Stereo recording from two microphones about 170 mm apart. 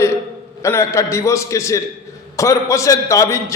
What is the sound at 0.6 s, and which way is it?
A man's voice, 15° left (ahead or behind).